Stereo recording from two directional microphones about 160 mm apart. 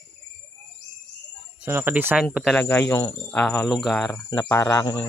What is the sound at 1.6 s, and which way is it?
Cricket, 15° right (ahead or behind).